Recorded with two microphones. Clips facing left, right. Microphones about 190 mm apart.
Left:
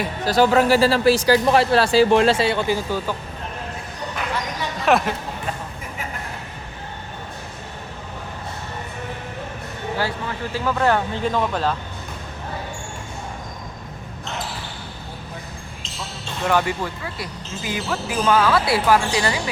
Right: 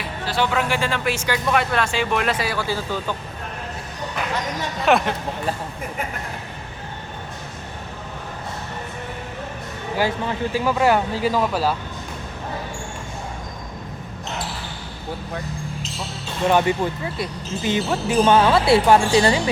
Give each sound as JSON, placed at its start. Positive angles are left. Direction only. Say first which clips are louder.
{"t": 0.0, "sound": "speech", "louder": "left 6 dB", "side_deg": 40}
{"t": 4.9, "sound": "speech", "louder": "even", "side_deg": 0}
{"t": 10.0, "sound": "speech", "louder": "right 6 dB", "side_deg": -15}
{"t": 16.5, "sound": "speech", "louder": "right 3 dB", "side_deg": -20}